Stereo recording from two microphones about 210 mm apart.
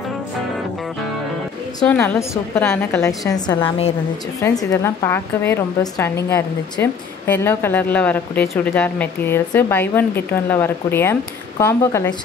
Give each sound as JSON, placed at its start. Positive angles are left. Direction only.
{"t": 1.9, "sound": "a woman's voice", "side_deg": 10}
{"t": 4.4, "sound": "a woman's voice", "side_deg": 15}